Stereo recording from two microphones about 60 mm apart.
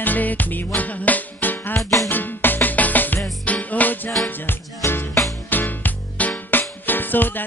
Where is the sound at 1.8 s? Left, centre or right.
Left.